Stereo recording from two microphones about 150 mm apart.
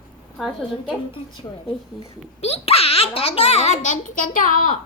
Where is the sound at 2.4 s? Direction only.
40° left (ahead or behind); by 4.7 s 60° left (ahead or behind).